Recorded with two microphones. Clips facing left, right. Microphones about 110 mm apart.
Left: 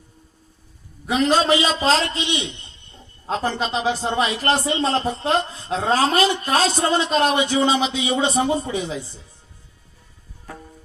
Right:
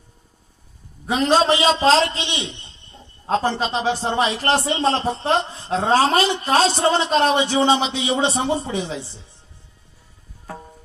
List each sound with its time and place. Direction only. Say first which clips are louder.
1.0 s a man's voice: right 1 dB; 30° right (ahead or behind)